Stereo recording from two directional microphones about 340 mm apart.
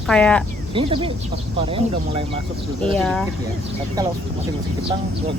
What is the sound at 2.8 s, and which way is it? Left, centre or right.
Speech, centre.